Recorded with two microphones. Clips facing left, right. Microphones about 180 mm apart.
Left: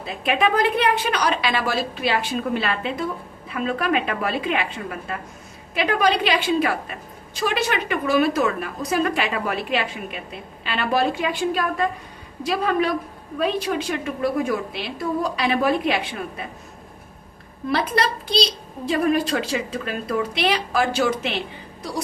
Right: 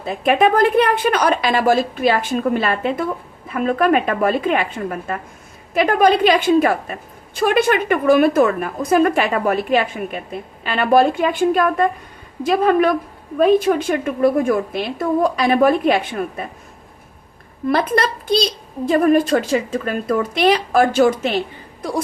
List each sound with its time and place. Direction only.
0.0 s a child's voice: 45° right (ahead or behind)
17.7 s a child's voice: 50° right (ahead or behind)